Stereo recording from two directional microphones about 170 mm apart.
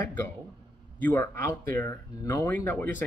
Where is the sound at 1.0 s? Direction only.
10° left (ahead or behind).